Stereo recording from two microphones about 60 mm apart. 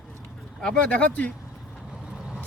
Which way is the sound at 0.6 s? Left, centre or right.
Centre.